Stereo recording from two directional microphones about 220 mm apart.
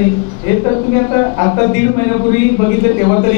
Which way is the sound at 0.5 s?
20° left (ahead or behind).